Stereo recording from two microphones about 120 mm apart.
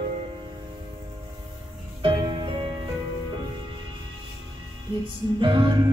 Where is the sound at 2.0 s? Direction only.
45° right (ahead or behind).